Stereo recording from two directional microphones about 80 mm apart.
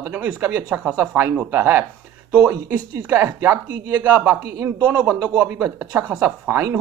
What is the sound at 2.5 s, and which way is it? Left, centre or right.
Speech, right.